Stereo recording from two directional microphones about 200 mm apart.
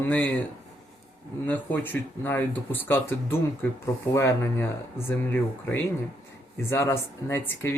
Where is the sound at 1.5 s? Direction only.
10° left (ahead or behind).